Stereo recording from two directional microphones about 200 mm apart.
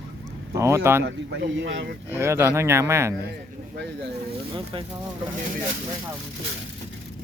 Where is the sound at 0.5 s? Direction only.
15° right (ahead or behind).